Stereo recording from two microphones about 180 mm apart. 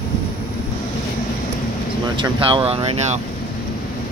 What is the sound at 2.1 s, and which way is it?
Speech, 30° right (ahead or behind).